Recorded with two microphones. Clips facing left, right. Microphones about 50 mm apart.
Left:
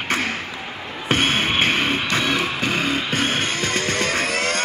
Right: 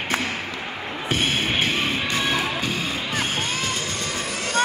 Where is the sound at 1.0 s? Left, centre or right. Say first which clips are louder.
Left 4 dB; left.